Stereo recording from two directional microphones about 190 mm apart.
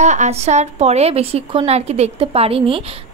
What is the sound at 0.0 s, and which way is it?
Speech, 40° right (ahead or behind).